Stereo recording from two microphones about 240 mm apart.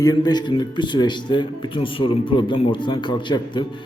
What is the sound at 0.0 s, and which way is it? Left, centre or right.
A man's voice, centre.